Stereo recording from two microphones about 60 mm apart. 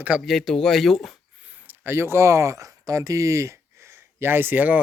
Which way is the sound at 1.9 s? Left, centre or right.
Right.